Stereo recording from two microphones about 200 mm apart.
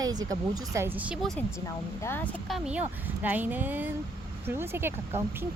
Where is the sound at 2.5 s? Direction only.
5° right (ahead or behind).